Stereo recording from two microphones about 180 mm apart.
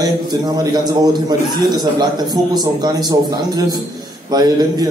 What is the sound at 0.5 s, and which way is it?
Speech, 20° right (ahead or behind).